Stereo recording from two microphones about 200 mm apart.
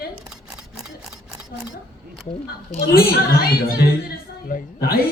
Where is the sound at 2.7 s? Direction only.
50° left (ahead or behind).